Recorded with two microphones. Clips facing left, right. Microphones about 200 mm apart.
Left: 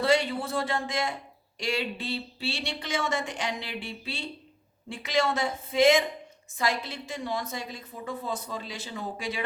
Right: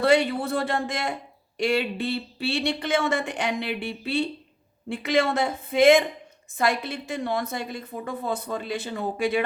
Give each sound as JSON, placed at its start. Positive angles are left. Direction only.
{"t": 0.0, "sound": "a woman's voice", "side_deg": -60}